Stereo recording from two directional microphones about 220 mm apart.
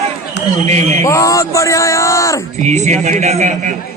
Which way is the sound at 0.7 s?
30° right (ahead or behind).